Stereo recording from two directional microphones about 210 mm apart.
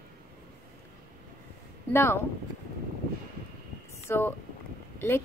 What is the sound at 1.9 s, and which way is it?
Speech, 10° left (ahead or behind).